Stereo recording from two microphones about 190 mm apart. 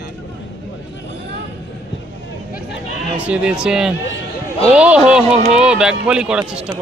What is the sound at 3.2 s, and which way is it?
Speech, 5° right (ahead or behind).